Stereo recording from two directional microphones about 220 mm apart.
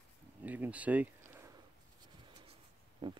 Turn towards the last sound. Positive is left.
turn(degrees=-20)  # may be behind; listen again after turning